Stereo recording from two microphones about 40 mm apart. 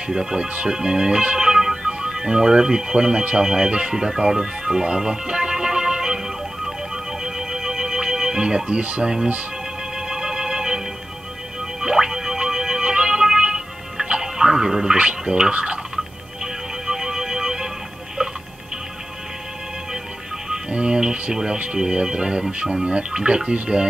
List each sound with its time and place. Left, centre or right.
0.1 s speech: centre
1.5 s music: centre
1.8 s speech: right
3.7 s music: centre
9.0 s speech: centre
9.9 s music: centre
11.8 s music: centre
15.0 s speech: right
16.8 s music: centre
20.4 s speech: centre